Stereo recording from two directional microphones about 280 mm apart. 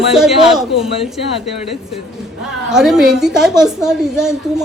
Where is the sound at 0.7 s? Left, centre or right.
Centre.